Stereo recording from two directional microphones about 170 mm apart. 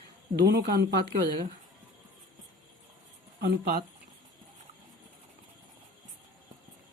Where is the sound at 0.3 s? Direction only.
65° right (ahead or behind).